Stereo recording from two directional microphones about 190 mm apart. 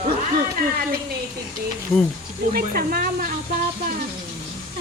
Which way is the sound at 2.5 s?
50° right (ahead or behind).